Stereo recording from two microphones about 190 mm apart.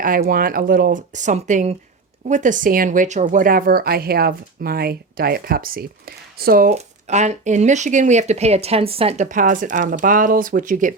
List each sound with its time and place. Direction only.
0.0 s speech: 45° right (ahead or behind)
6.7 s speech: 35° right (ahead or behind)